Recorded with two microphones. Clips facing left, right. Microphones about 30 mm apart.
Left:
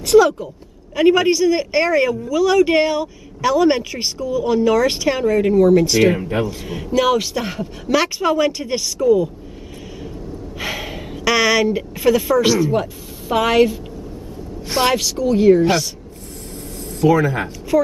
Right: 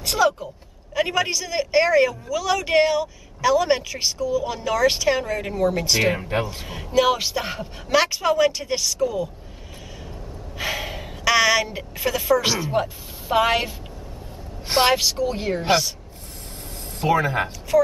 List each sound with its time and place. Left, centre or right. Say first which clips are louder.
0.0 s speech: left 8 dB; centre
0.9 s speech: left 8 dB; centre
10.6 s a woman's voice: left 1 dB; centre
14.9 s speech: left 3 dB; centre
17.0 s speech: left 5 dB; right